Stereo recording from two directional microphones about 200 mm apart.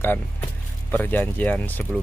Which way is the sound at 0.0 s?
10° left (ahead or behind).